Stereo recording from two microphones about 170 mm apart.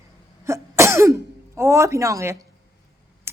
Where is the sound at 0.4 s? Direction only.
15° right (ahead or behind).